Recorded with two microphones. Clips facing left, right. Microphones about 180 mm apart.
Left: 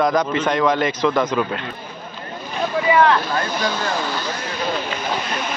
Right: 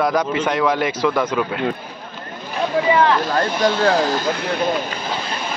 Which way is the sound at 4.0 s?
45° right (ahead or behind).